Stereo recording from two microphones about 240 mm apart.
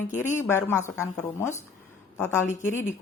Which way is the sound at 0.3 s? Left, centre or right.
Centre.